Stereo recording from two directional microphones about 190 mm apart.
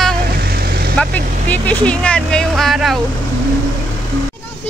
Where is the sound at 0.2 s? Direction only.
50° right (ahead or behind).